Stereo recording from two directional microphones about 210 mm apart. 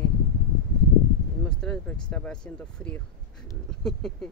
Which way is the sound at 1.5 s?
5° left (ahead or behind).